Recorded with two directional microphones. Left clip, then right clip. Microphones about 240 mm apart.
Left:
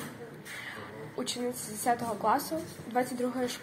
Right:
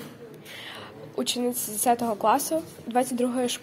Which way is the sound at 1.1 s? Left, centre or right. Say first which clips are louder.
Right 7 dB; right.